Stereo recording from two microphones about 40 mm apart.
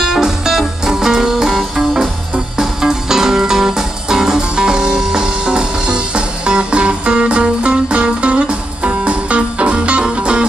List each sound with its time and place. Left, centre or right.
0.0 s music: centre